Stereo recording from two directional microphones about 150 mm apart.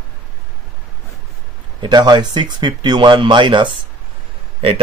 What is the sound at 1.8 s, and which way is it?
Speech, 30° right (ahead or behind).